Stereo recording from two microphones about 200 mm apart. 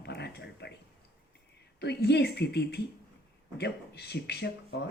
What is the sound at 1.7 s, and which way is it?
Speech, 55° left (ahead or behind).